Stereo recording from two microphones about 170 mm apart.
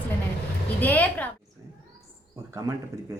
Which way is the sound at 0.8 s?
10° left (ahead or behind).